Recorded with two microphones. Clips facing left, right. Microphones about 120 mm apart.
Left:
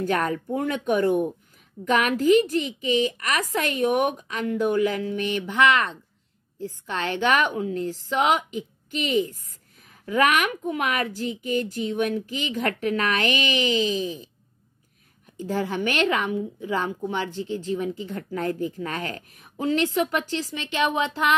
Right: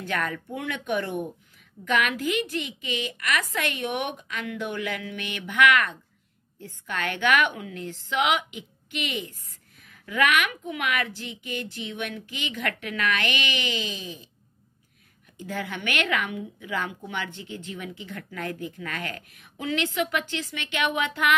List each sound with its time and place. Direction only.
0.0 s a woman's voice: 40° left (ahead or behind)
15.3 s a woman's voice: 35° left (ahead or behind)